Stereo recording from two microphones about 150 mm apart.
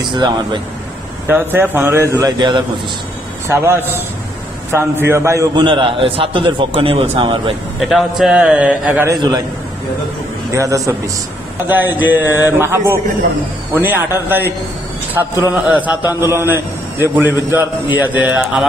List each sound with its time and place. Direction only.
0.0 s a man's voice: 30° right (ahead or behind)
1.2 s a man's voice: 15° right (ahead or behind); by 2.6 s 30° right (ahead or behind)
3.4 s a man's voice: 15° right (ahead or behind)
5.6 s a man's voice: 35° right (ahead or behind)
8.2 s a man's voice: 5° right (ahead or behind)
9.1 s a man's voice: 30° right (ahead or behind)
10.5 s a man's voice: 20° right (ahead or behind); by 18.7 s 5° right (ahead or behind)